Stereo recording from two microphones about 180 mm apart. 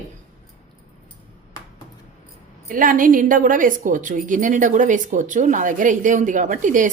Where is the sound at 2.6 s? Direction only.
50° right (ahead or behind).